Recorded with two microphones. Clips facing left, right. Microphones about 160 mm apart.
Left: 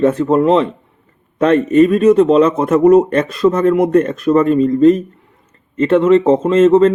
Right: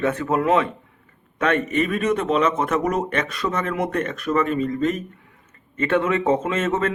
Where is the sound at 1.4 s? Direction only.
35° left (ahead or behind).